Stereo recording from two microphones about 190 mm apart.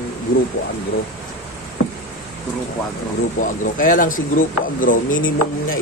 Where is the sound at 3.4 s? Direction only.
45° left (ahead or behind).